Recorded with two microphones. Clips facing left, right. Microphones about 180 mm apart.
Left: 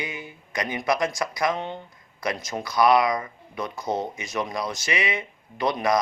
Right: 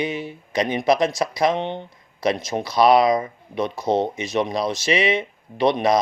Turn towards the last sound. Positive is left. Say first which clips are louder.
# right 5 dB
turn(degrees=-25)  # may be behind; listen again after turning